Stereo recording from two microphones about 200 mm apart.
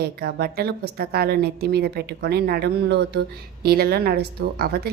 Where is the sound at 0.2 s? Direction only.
50° right (ahead or behind).